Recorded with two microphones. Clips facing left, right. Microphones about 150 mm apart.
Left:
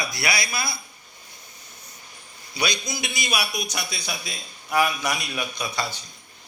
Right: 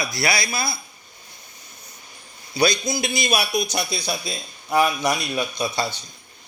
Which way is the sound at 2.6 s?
35° right (ahead or behind).